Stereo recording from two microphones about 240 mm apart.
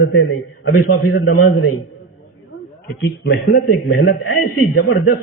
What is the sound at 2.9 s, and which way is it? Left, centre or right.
A man's voice, left.